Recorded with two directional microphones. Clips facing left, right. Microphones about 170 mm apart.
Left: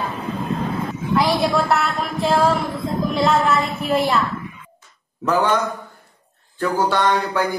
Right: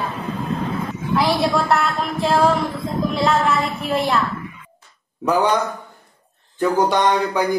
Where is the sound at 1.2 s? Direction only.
Centre (ahead or behind).